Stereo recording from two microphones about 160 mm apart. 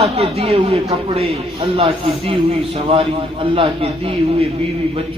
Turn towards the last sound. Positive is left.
turn(degrees=-35)  # may be behind; listen again after turning